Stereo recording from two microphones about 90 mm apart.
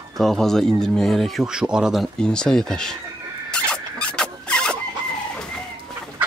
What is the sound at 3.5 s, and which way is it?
Zipper, 10° left (ahead or behind).